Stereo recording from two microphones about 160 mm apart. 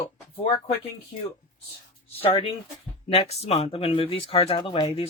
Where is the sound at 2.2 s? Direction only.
35° left (ahead or behind).